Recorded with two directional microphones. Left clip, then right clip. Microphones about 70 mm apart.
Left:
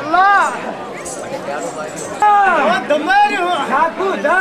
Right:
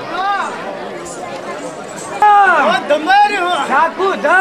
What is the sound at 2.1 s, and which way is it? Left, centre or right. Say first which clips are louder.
Speech: right 3 dB; centre.